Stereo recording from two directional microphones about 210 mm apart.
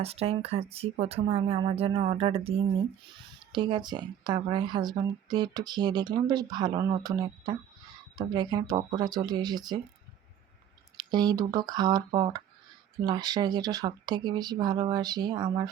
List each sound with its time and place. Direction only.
0.0 s speech: 30° right (ahead or behind)
10.9 s speech: 20° right (ahead or behind)